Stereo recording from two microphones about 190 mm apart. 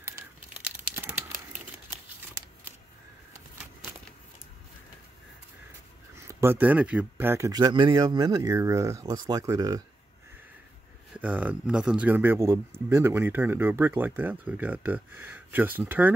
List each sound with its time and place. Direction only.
0.6 s crumpling: 10° right (ahead or behind)
6.2 s speech: 10° right (ahead or behind)
11.1 s speech: 10° right (ahead or behind)